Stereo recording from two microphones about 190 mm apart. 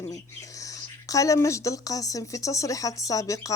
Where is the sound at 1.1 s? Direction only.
15° left (ahead or behind).